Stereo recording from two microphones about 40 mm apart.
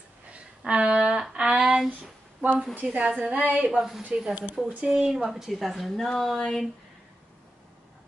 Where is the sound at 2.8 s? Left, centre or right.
Right.